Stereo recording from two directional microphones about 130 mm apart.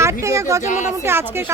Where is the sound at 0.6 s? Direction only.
70° left (ahead or behind).